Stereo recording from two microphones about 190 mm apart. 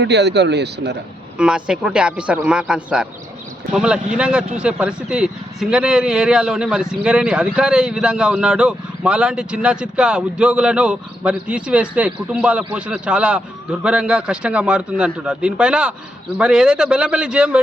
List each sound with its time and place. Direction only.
0.0 s speech: 65° right (ahead or behind)
1.4 s a man's voice: 5° right (ahead or behind)